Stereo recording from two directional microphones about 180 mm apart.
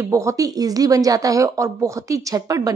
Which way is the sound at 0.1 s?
15° right (ahead or behind).